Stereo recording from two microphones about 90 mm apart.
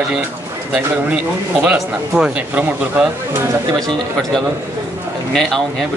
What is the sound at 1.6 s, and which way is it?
Speech, 15° right (ahead or behind).